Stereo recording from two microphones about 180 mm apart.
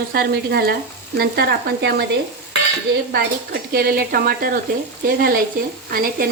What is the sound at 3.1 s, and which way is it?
Speech, 60° right (ahead or behind).